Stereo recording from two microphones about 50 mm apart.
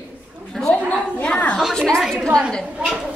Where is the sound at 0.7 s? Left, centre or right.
Left.